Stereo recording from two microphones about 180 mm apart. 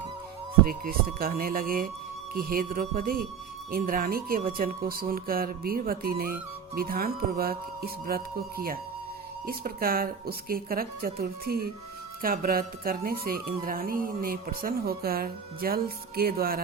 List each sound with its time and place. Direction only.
0.7 s speech: 55° right (ahead or behind)